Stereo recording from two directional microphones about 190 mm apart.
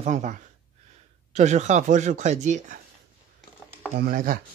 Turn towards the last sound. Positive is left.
turn(degrees=-45)  # may be behind; listen again after turning